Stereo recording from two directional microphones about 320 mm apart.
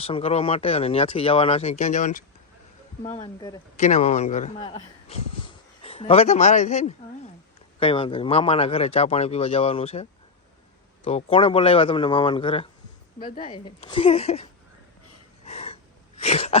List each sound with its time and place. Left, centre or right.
0.0 s speech: centre
15.4 s a sound: centre
16.2 s throat clearing: centre